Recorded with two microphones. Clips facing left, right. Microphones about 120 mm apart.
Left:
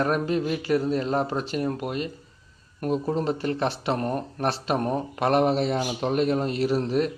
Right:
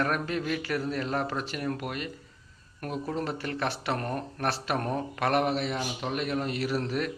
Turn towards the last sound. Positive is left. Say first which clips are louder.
# left 6 dB
turn(degrees=25)  # may be behind; listen again after turning